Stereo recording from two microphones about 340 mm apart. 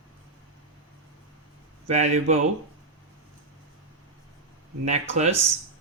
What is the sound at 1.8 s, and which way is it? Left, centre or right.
Speech, centre.